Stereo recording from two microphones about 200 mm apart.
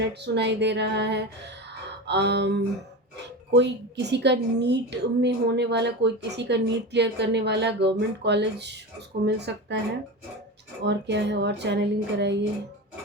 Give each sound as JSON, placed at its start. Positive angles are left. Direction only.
{"t": 0.1, "sound": "a woman's voice", "side_deg": -60}
{"t": 10.8, "sound": "a woman's voice", "side_deg": -60}